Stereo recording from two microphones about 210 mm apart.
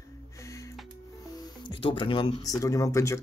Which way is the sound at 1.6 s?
25° left (ahead or behind).